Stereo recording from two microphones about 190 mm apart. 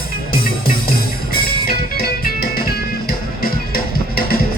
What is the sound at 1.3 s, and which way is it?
Music, 50° left (ahead or behind).